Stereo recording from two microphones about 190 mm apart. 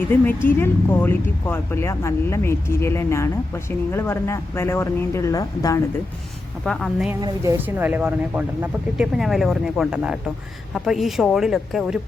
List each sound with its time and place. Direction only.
0.1 s speech: 10° left (ahead or behind)
6.7 s speech: centre (ahead or behind)
7.2 s a woman's voice: 20° right (ahead or behind)
7.6 s speech: 10° right (ahead or behind)